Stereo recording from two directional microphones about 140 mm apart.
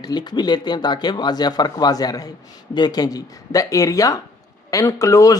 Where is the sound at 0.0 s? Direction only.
30° left (ahead or behind).